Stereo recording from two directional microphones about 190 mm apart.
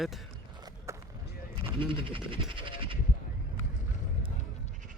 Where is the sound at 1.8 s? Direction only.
25° right (ahead or behind).